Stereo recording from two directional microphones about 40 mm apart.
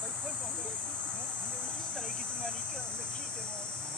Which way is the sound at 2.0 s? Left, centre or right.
Centre.